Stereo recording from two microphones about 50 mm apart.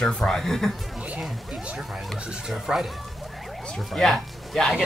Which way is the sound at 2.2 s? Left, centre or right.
Centre.